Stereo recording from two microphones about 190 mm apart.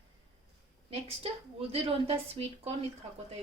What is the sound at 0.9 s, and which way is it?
A woman's voice, 30° right (ahead or behind).